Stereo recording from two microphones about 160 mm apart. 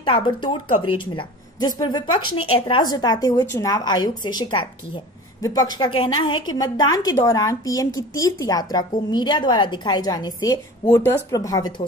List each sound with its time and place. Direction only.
0.0 s a woman's voice: 30° left (ahead or behind)